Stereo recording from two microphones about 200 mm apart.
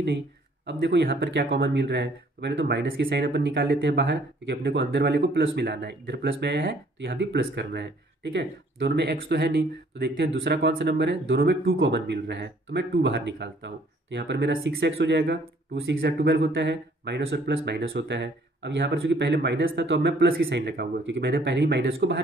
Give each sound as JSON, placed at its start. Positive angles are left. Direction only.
{"t": 0.7, "sound": "speech", "side_deg": -55}